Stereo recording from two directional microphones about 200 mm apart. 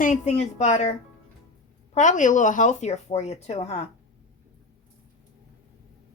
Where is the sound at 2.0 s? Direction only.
40° left (ahead or behind).